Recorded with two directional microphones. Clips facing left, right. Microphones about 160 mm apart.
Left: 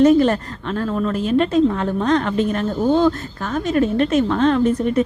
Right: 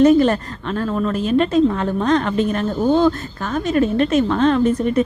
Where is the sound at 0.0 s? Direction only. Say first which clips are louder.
Right 1 dB; 20° right (ahead or behind).